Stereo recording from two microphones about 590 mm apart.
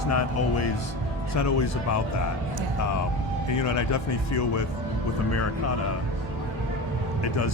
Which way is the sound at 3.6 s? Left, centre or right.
Left.